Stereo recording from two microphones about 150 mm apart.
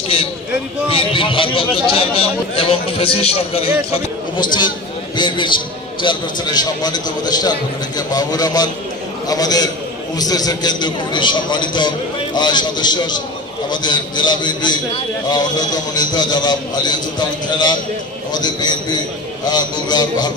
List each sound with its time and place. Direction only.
0.8 s a man's voice: 35° left (ahead or behind)
4.6 s a man's voice: 30° left (ahead or behind)
18.3 s a man's voice: 30° left (ahead or behind)